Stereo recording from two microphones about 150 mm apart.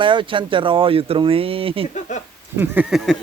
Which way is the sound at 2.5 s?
15° right (ahead or behind).